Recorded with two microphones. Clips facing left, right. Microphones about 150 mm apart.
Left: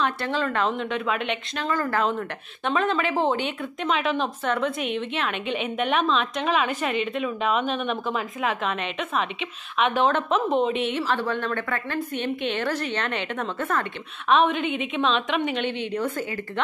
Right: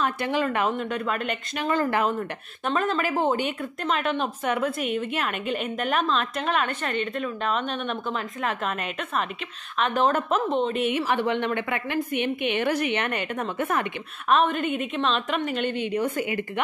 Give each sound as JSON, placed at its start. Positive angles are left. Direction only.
{"t": 0.0, "sound": "a woman's voice", "side_deg": -15}
{"t": 1.6, "sound": "speech", "side_deg": -20}
{"t": 2.0, "sound": "a woman's voice", "side_deg": -5}
{"t": 10.9, "sound": "a woman's voice", "side_deg": -10}
{"t": 14.3, "sound": "a woman's voice", "side_deg": 0}
{"t": 15.9, "sound": "a woman's voice", "side_deg": -10}